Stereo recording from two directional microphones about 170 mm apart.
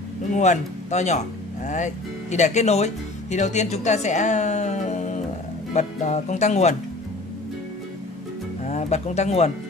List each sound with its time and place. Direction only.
0.3 s speech: 45° left (ahead or behind)
2.3 s speech: 45° left (ahead or behind)
8.6 s speech: 40° left (ahead or behind)